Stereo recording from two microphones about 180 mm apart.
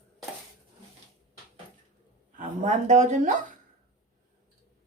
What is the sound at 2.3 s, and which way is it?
A woman's voice, 45° right (ahead or behind).